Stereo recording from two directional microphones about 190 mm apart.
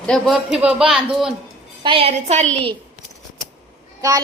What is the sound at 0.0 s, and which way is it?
A woman's voice, centre (ahead or behind).